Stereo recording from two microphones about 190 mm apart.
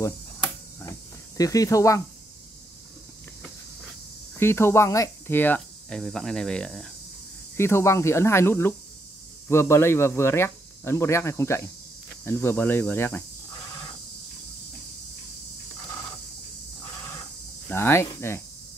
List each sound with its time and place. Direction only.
0.0 s a sound: 15° left (ahead or behind)
4.4 s speech: 15° left (ahead or behind)
7.5 s speech: 15° left (ahead or behind)
17.6 s speech: 15° left (ahead or behind)